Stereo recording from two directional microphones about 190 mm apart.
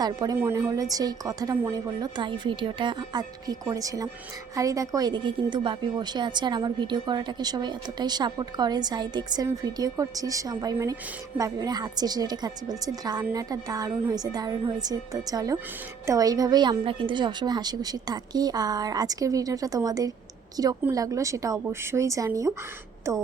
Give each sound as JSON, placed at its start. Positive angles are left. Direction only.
{"t": 0.0, "sound": "a woman's voice", "side_deg": -20}